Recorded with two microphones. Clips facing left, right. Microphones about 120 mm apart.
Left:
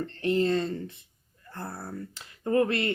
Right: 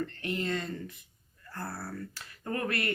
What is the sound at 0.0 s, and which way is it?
Speech, 30° left (ahead or behind).